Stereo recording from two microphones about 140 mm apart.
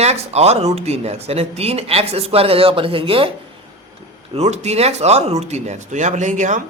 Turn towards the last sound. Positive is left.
turn(degrees=-60)  # may be behind; listen again after turning